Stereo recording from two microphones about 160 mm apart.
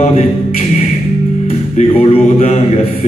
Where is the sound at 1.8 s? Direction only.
40° left (ahead or behind).